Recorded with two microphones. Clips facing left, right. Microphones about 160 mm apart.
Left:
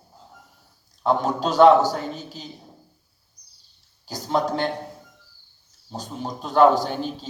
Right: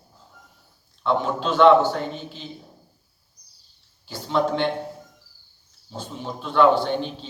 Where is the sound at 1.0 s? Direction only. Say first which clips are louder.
Left 1 dB; 40° left (ahead or behind).